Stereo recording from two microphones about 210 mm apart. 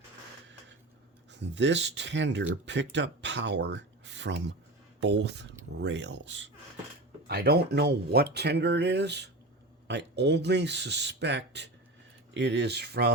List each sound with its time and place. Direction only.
1.3 s speech: 55° right (ahead or behind)